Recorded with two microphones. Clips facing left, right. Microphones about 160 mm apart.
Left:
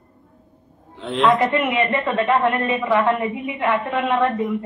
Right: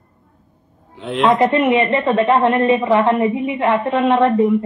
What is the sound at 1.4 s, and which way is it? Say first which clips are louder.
Speech: right 5 dB; 25° right (ahead or behind).